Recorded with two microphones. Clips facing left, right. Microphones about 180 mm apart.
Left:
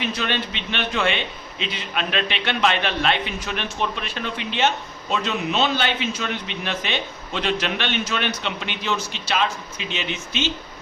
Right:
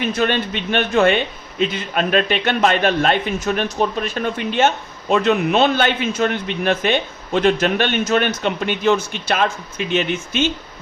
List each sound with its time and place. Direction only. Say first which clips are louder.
0.0 s a man's voice: right 6 dB; 50° right (ahead or behind)